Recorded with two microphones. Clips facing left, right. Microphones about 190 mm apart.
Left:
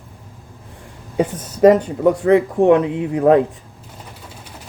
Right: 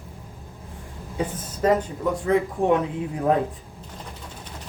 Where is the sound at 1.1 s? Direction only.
70° left (ahead or behind).